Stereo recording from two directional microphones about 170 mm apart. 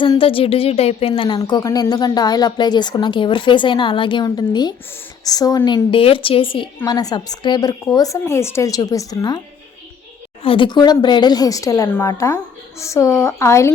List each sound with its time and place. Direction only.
0.0 s a woman's voice: 30° left (ahead or behind)
10.4 s a woman's voice: 30° left (ahead or behind)